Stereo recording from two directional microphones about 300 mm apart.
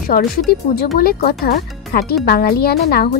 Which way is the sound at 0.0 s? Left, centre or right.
Left.